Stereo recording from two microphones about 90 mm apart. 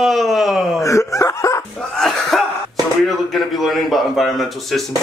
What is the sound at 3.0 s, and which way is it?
A man's voice, centre (ahead or behind).